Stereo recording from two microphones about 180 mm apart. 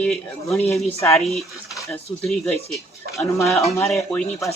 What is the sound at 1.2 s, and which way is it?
Speech, centre (ahead or behind).